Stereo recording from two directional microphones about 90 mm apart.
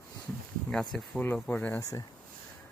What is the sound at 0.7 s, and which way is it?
Speech, 5° left (ahead or behind).